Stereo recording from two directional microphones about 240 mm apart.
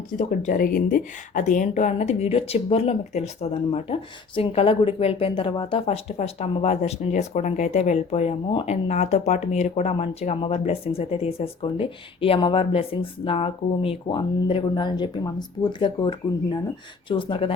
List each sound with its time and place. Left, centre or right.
0.2 s speech: left